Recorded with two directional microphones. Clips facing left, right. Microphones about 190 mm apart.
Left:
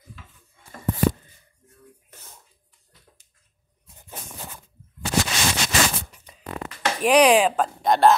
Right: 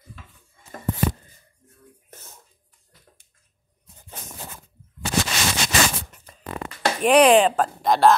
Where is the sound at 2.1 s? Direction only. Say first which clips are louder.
Right 3 dB; 45° right (ahead or behind).